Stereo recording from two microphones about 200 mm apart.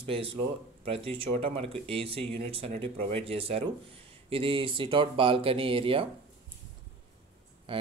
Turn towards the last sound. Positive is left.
turn(degrees=-25)  # may be behind; listen again after turning